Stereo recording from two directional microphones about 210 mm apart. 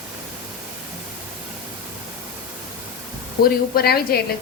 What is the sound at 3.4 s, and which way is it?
Speech, 45° left (ahead or behind).